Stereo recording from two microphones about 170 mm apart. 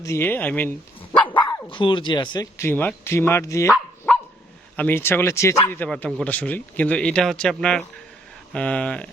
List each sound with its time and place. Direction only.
0.0 s speech: 15° left (ahead or behind)
1.2 s speech: 30° left (ahead or behind)
2.6 s speech: 10° left (ahead or behind)
4.8 s speech: 10° left (ahead or behind)